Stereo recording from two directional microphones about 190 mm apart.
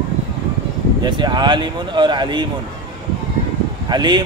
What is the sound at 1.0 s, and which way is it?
A man's voice, 25° right (ahead or behind).